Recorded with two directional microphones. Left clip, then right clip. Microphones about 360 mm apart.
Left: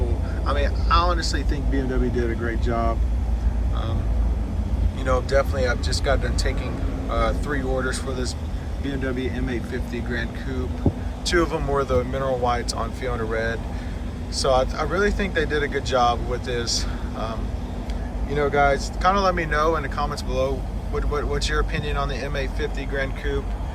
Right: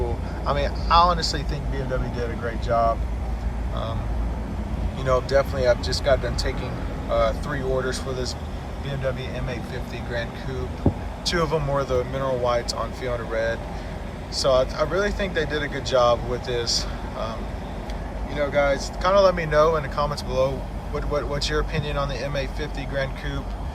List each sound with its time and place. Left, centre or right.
0.4 s speech: centre
5.0 s speech: centre
9.5 s speech: centre
10.8 s speech: centre
11.3 s speech: centre
18.3 s speech: centre